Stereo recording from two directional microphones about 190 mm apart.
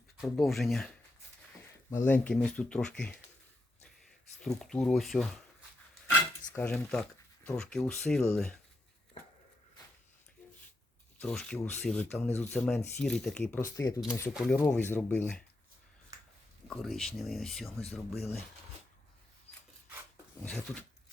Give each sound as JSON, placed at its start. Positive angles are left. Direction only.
{"t": 0.2, "sound": "speech", "side_deg": 0}
{"t": 1.9, "sound": "speech", "side_deg": 10}
{"t": 4.4, "sound": "speech", "side_deg": 0}
{"t": 6.1, "sound": "a sound", "side_deg": 10}
{"t": 7.5, "sound": "speech", "side_deg": 5}
{"t": 11.2, "sound": "speech", "side_deg": 5}
{"t": 13.6, "sound": "speech", "side_deg": 15}
{"t": 14.3, "sound": "speech", "side_deg": 5}
{"t": 16.6, "sound": "speech", "side_deg": 0}
{"t": 20.4, "sound": "speech", "side_deg": 5}